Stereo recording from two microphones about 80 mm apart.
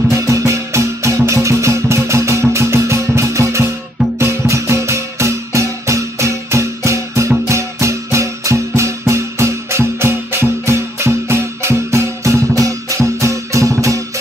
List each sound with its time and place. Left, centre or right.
0.1 s music: right